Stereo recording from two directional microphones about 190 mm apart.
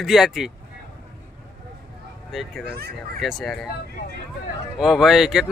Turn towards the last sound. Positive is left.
turn(degrees=0)  # may be behind; listen again after turning